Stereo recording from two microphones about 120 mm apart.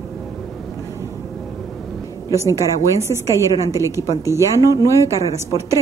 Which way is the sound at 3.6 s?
25° right (ahead or behind).